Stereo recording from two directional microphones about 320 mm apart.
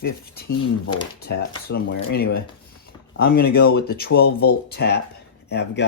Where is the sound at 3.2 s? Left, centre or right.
Left.